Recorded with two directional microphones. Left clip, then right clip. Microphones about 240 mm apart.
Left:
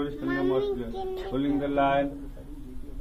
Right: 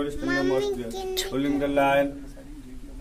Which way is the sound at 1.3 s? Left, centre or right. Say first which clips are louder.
Right 2 dB; centre.